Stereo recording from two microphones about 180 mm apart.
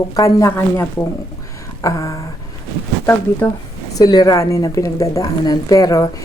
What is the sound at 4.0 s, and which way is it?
A woman's voice, 20° left (ahead or behind).